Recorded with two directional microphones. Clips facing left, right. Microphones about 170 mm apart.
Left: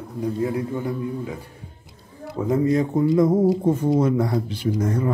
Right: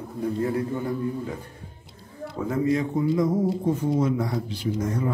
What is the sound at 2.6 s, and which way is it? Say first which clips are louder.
Speech: left 2 dB; 40° left (ahead or behind).